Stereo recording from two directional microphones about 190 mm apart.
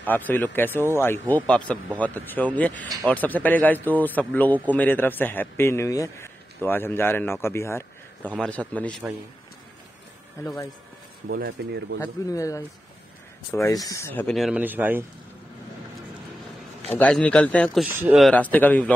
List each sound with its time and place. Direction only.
0.0 s a man's voice: 10° left (ahead or behind)
11.2 s speech: 60° right (ahead or behind)
12.0 s a man's voice: 15° left (ahead or behind); by 15.0 s 10° right (ahead or behind)
16.9 s a man's voice: 5° left (ahead or behind)
17.8 s a man's voice: 10° right (ahead or behind); by 18.9 s 10° left (ahead or behind)